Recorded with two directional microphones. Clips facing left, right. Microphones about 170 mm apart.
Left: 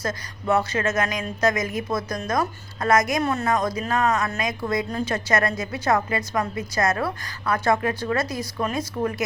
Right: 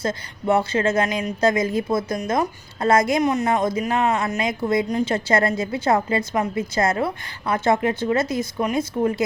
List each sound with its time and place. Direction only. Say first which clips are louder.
0.0 s a woman's voice: right 4 dB; 25° right (ahead or behind)